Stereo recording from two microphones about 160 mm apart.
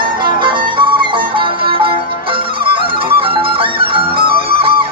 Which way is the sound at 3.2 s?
35° right (ahead or behind).